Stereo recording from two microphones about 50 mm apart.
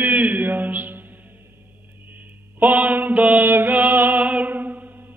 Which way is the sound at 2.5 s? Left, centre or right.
Right.